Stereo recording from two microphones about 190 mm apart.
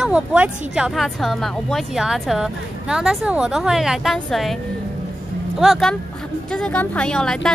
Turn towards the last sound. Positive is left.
turn(degrees=5)  # may be behind; listen again after turning